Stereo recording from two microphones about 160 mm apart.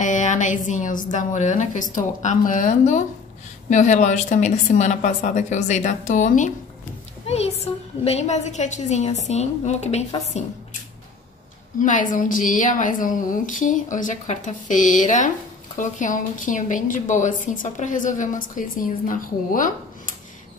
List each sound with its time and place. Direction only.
0.0 s a woman's voice: 50° left (ahead or behind)
11.8 s a woman's voice: 55° left (ahead or behind)